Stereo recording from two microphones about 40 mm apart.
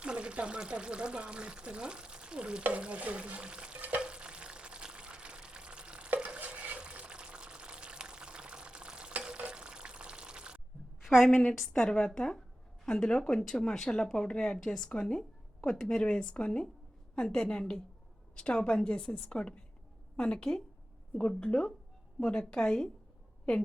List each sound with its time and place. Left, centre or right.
0.0 s speech: right
3.8 s stir: right
4.0 s a sound: right
6.4 s a sound: right
6.8 s water: right
11.3 s a woman's voice: left